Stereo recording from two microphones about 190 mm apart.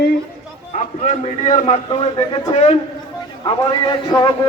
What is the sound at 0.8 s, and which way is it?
A man's voice, 35° left (ahead or behind).